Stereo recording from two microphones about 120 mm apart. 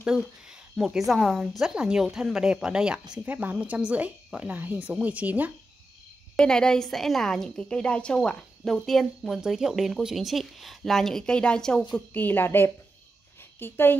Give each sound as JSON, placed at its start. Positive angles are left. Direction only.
{"t": 0.0, "sound": "speech", "side_deg": -5}
{"t": 6.3, "sound": "a woman's voice", "side_deg": 5}
{"t": 13.4, "sound": "a sound", "side_deg": 20}